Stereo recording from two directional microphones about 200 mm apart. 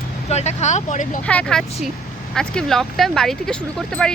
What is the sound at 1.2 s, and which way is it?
Speech, 5° left (ahead or behind).